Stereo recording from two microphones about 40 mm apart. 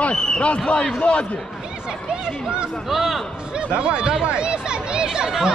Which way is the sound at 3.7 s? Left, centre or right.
Right.